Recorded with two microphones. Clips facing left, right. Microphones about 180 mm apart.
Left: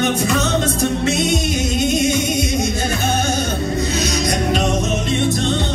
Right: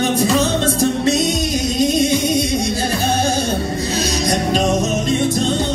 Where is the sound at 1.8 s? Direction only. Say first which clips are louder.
Right 3 dB; 35° right (ahead or behind).